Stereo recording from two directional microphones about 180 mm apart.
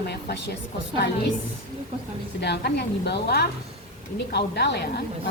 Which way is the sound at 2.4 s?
70° left (ahead or behind).